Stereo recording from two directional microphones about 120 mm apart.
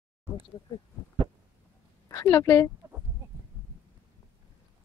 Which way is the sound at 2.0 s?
25° left (ahead or behind).